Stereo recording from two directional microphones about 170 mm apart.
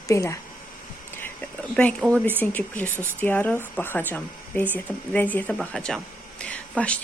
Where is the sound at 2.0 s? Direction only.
10° left (ahead or behind).